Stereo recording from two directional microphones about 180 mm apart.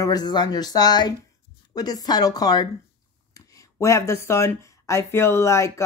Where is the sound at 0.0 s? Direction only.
20° left (ahead or behind).